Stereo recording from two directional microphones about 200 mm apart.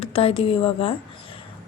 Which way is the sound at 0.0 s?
30° left (ahead or behind).